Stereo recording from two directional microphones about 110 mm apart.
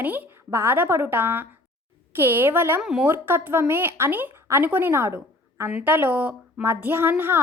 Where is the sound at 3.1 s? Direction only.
20° right (ahead or behind).